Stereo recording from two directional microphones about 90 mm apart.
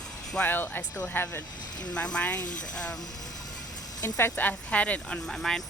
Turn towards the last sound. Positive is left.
turn(degrees=5)  # may be behind; listen again after turning